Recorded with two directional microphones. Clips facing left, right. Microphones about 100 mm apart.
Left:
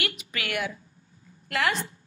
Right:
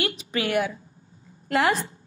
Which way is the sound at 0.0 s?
30° right (ahead or behind).